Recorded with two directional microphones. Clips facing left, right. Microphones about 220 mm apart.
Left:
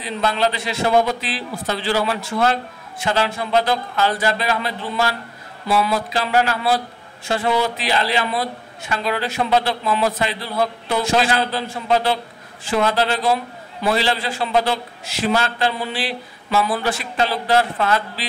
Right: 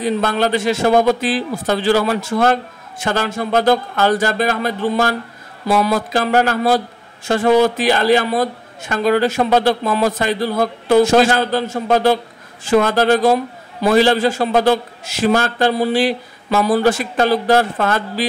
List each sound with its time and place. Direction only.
0.0 s a man's voice: 50° right (ahead or behind)